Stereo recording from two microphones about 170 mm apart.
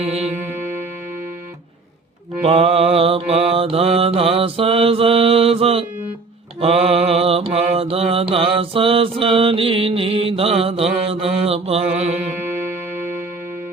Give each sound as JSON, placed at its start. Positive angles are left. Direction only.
{"t": 0.0, "sound": "music", "side_deg": -35}
{"t": 2.4, "sound": "mantra", "side_deg": -35}
{"t": 12.4, "sound": "music", "side_deg": -10}